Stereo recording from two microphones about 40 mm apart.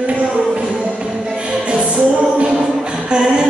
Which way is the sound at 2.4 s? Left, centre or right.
Centre.